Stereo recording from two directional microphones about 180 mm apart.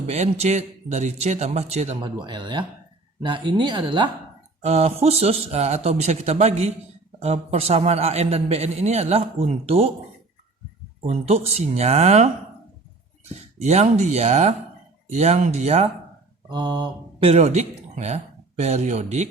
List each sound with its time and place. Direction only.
0.1 s a man's voice: 40° right (ahead or behind)
11.0 s a man's voice: 35° right (ahead or behind)
13.3 s a man's voice: 40° right (ahead or behind)
16.5 s speech: 25° right (ahead or behind); by 19.3 s 40° right (ahead or behind)